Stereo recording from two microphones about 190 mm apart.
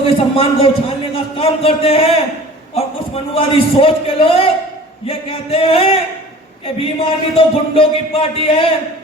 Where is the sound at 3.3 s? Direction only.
30° left (ahead or behind).